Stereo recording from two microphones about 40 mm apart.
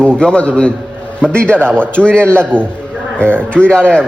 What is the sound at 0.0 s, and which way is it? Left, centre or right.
A man's voice, left.